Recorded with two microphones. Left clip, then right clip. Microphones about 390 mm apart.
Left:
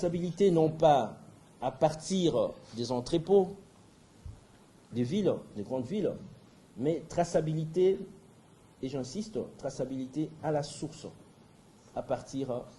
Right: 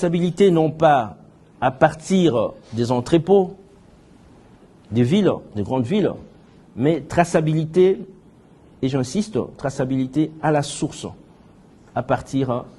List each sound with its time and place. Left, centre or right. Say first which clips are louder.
0.0 s a man's voice: right 11 dB; right
4.9 s a man's voice: right 12 dB; right